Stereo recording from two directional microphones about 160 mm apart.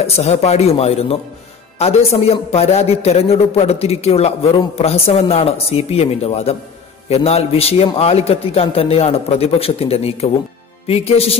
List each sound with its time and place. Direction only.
0.0 s a man's voice: 40° left (ahead or behind)